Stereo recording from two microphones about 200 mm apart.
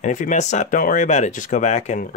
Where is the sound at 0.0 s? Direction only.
40° left (ahead or behind).